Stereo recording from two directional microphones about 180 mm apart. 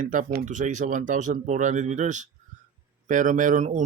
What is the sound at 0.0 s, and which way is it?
A man's voice, 45° right (ahead or behind).